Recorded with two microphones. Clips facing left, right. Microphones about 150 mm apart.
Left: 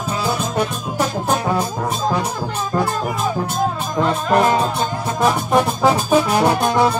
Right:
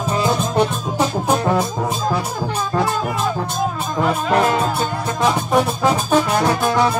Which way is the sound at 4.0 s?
5° right (ahead or behind).